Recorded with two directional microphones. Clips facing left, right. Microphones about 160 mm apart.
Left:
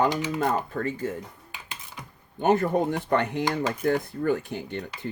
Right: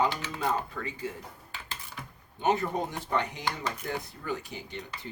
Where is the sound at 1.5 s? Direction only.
15° left (ahead or behind).